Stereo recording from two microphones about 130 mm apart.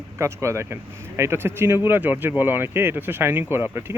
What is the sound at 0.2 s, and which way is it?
Speech, 20° right (ahead or behind).